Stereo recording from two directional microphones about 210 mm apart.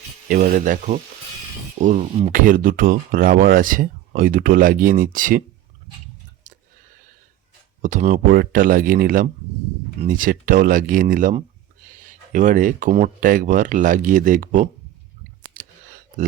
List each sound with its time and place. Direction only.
0.3 s speech: 40° right (ahead or behind)
7.8 s speech: 40° right (ahead or behind)
15.5 s a sound: 40° right (ahead or behind)